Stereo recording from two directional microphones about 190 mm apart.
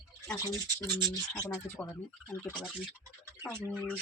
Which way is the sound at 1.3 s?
15° left (ahead or behind).